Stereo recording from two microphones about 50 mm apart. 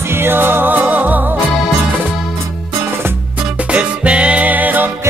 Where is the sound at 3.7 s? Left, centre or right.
Right.